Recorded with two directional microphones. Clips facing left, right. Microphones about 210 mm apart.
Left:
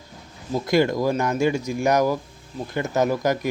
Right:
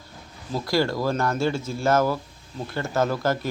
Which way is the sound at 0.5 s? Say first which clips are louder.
Left 4 dB; 20° left (ahead or behind).